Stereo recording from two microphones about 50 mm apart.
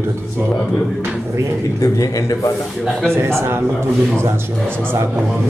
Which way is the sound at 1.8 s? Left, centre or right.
Left.